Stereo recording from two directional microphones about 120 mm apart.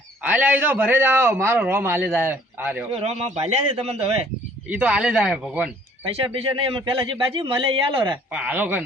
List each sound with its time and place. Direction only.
0.2 s a man's voice: 10° right (ahead or behind)
2.9 s a man's voice: 65° right (ahead or behind)
4.7 s a man's voice: 10° right (ahead or behind)
6.1 s a man's voice: 50° right (ahead or behind)
8.3 s a man's voice: 10° right (ahead or behind)